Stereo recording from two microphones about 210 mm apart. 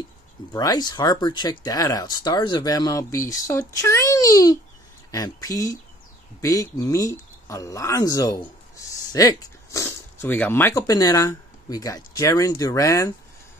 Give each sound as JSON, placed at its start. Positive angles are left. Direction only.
{"t": 0.5, "sound": "speech", "side_deg": 20}